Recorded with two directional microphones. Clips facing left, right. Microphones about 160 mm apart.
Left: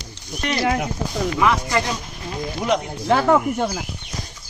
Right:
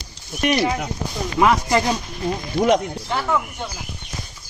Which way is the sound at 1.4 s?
20° right (ahead or behind).